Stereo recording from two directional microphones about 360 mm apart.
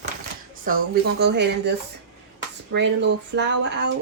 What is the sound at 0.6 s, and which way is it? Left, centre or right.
Speech, right.